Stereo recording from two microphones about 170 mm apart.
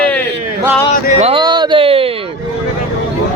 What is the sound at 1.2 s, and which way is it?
Music, 30° right (ahead or behind).